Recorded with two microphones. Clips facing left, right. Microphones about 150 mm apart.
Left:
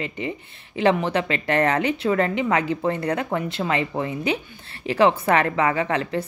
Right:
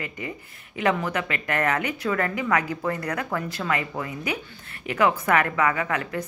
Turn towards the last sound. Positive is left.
turn(degrees=30)  # may be behind; listen again after turning